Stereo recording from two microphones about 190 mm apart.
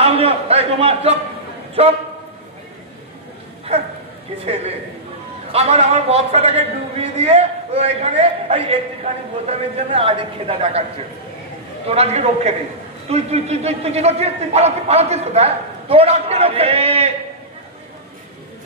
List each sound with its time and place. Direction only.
0.0 s a man's voice: 30° right (ahead or behind)
5.5 s a man's voice: 35° right (ahead or behind)
11.9 s a man's voice: 35° right (ahead or behind)